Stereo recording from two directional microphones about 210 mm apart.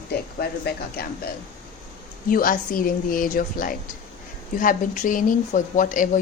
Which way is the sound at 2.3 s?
40° left (ahead or behind).